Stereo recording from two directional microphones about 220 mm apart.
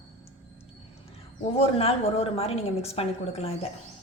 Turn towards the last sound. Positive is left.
turn(degrees=25)  # may be behind; listen again after turning